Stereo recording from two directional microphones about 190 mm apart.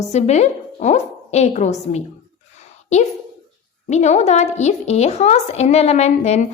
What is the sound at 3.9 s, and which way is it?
Speech, 35° left (ahead or behind).